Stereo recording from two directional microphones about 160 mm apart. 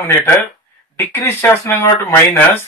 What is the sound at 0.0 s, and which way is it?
Speech, 15° left (ahead or behind).